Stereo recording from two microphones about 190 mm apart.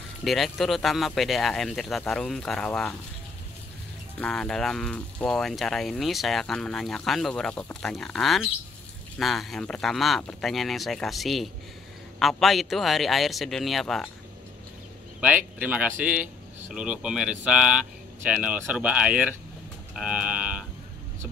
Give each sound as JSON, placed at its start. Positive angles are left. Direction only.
{"t": 0.2, "sound": "speech", "side_deg": 0}
{"t": 4.2, "sound": "speech", "side_deg": 5}
{"t": 15.1, "sound": "speech", "side_deg": -10}